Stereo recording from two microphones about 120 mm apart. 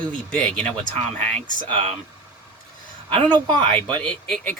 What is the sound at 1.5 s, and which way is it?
Speech, 45° right (ahead or behind).